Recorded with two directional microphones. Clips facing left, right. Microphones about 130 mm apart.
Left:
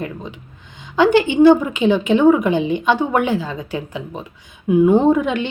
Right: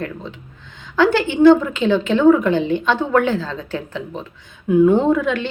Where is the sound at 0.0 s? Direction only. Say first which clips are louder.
Even; 15° left (ahead or behind).